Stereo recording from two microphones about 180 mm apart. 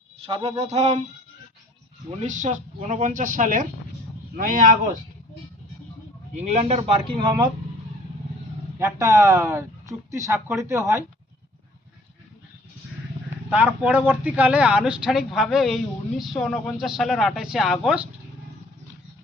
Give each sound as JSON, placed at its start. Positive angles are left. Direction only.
{"t": 0.2, "sound": "speech", "side_deg": -30}
{"t": 2.0, "sound": "speech", "side_deg": -40}
{"t": 6.3, "sound": "speech", "side_deg": -40}
{"t": 8.8, "sound": "speech", "side_deg": -15}
{"t": 13.5, "sound": "a woman's voice", "side_deg": -5}